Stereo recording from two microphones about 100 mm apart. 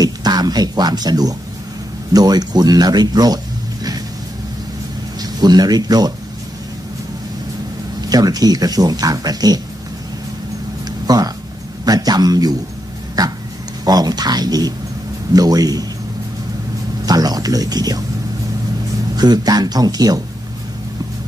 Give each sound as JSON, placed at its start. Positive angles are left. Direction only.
{"t": 0.0, "sound": "speech", "side_deg": -40}
{"t": 5.2, "sound": "speech", "side_deg": -40}
{"t": 8.1, "sound": "speech", "side_deg": -40}
{"t": 11.1, "sound": "speech", "side_deg": -40}
{"t": 17.0, "sound": "speech", "side_deg": -40}
{"t": 19.1, "sound": "speech", "side_deg": -45}